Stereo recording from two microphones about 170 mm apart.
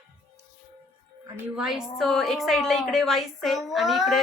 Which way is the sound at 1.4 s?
5° right (ahead or behind).